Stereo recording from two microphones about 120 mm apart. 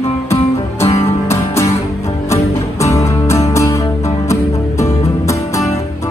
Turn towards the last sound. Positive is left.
turn(degrees=25)  # may be behind; listen again after turning